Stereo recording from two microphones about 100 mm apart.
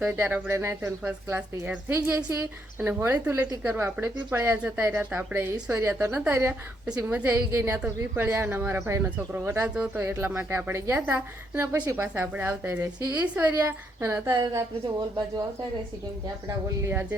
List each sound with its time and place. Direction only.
0.0 s a woman's voice: 15° right (ahead or behind)
1.4 s speech: 10° right (ahead or behind)
1.9 s a woman's voice: 20° right (ahead or behind)
9.0 s speech: 15° right (ahead or behind)
9.6 s speech: 10° right (ahead or behind)
9.9 s a woman's voice: 20° right (ahead or behind)
13.7 s a woman's voice: 25° right (ahead or behind)
14.3 s a woman's voice: 45° right (ahead or behind)
16.8 s a woman's voice: 20° right (ahead or behind)